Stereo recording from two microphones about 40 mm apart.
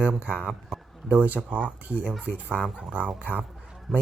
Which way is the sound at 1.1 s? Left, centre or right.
Right.